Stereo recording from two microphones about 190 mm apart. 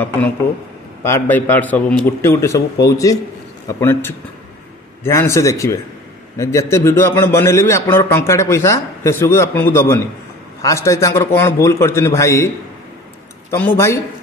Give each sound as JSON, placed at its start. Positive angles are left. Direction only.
{"t": 1.0, "sound": "a man's voice", "side_deg": 10}
{"t": 13.5, "sound": "a man's voice", "side_deg": 10}